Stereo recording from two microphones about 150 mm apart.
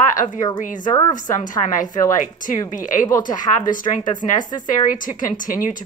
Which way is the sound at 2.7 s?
60° left (ahead or behind).